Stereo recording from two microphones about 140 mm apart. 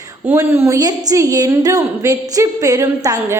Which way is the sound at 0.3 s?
20° right (ahead or behind).